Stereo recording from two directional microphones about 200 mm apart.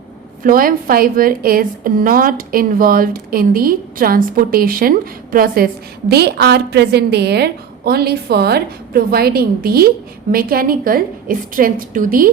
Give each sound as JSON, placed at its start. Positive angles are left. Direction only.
{"t": 0.4, "sound": "a woman's voice", "side_deg": -45}